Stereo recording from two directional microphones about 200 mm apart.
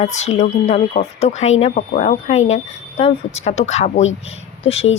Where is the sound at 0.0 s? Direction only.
35° left (ahead or behind).